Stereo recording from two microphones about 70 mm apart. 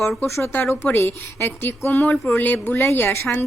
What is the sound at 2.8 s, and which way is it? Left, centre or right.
Speech, left.